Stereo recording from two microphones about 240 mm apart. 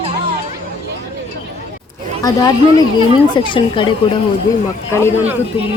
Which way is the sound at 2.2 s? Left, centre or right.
Centre.